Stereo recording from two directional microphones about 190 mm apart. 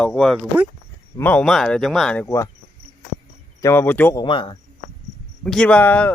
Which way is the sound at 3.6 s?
10° left (ahead or behind).